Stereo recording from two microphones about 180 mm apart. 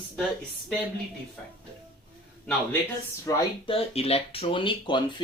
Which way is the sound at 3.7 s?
35° left (ahead or behind).